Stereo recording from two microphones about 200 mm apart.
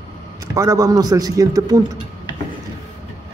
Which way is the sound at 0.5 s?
15° right (ahead or behind).